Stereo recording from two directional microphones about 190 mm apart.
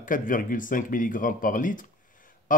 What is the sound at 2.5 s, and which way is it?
Honk, 45° left (ahead or behind).